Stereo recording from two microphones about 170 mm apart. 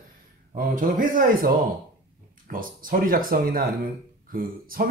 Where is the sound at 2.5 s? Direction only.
55° right (ahead or behind).